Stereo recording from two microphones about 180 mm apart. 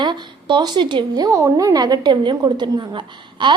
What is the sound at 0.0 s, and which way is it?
Speech, 25° right (ahead or behind).